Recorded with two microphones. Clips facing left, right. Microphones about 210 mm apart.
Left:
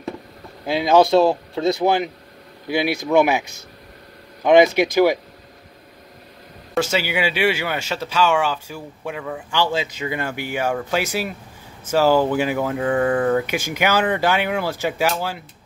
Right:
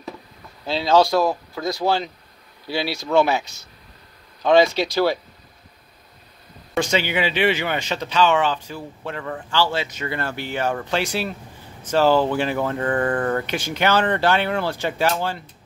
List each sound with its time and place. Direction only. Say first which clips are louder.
0.7 s speech: left 2 dB; 15° left (ahead or behind)
6.7 s speech: even; 5° left (ahead or behind)